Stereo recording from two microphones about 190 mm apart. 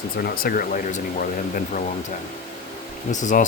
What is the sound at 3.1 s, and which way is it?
Speech, 40° left (ahead or behind).